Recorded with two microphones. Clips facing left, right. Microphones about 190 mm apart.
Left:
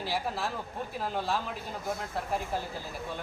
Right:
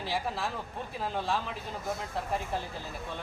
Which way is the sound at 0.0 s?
5° left (ahead or behind).